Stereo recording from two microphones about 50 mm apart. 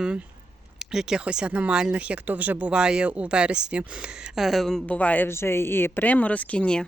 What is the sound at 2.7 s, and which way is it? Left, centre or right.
Speech, centre.